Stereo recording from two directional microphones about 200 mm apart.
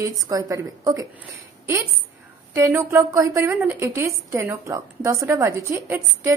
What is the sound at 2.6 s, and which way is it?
A woman's voice, 15° right (ahead or behind).